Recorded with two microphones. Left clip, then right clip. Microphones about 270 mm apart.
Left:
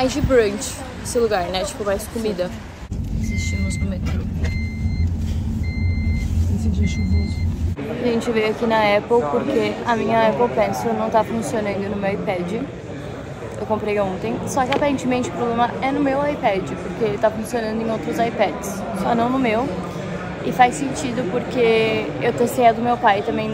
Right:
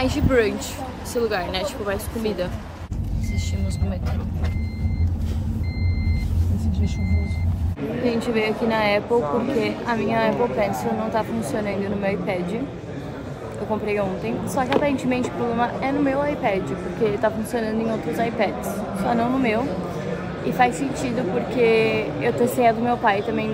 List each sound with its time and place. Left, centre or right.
0.0 s a woman's voice: centre
8.3 s a woman's voice: centre
13.7 s a woman's voice: centre
21.5 s a woman's voice: centre